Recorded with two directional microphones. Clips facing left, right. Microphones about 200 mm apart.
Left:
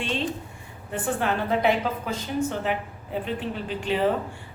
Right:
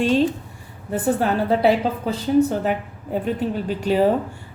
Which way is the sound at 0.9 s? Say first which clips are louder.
Right 6 dB; 40° right (ahead or behind).